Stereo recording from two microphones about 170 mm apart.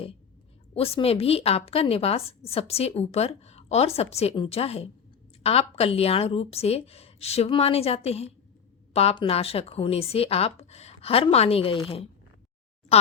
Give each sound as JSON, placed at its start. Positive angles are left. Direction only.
{"t": 0.7, "sound": "speech", "side_deg": 35}